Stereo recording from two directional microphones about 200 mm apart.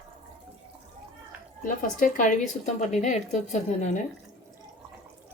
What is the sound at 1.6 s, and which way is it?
Speech, 40° left (ahead or behind).